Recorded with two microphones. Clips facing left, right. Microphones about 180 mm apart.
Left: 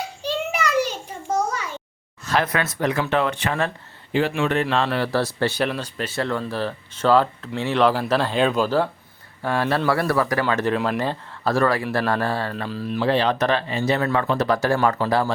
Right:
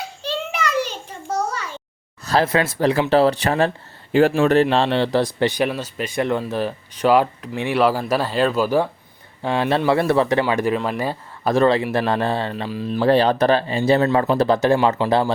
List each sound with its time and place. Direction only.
0.2 s a sound: 10° left (ahead or behind)
2.2 s speech: 30° right (ahead or behind)
10.4 s speech: 10° right (ahead or behind)
12.9 s speech: 40° right (ahead or behind); by 15.3 s 25° right (ahead or behind)